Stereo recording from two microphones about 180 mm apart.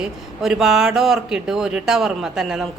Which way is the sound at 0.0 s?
5° right (ahead or behind).